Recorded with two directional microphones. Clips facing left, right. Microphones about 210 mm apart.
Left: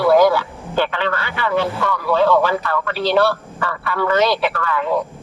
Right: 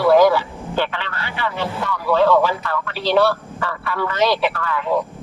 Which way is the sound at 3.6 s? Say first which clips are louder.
Left 2 dB; 60° left (ahead or behind).